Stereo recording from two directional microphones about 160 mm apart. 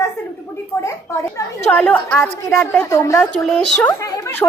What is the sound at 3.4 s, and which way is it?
Speech, 5° left (ahead or behind).